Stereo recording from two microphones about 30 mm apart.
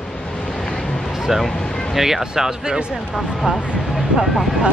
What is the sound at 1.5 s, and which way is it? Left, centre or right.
Speech, left.